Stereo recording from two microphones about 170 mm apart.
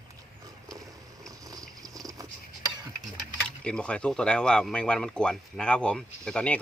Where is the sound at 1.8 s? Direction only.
20° right (ahead or behind).